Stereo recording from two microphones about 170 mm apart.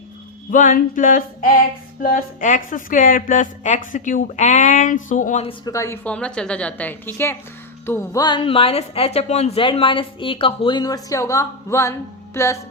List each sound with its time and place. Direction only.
0.5 s speech: 50° left (ahead or behind)
5.5 s speech: 20° left (ahead or behind)
6.1 s a woman's voice: 5° left (ahead or behind)
8.2 s speech: 30° left (ahead or behind)